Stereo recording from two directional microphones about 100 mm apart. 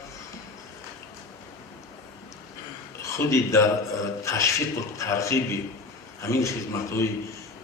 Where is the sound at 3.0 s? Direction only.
30° left (ahead or behind).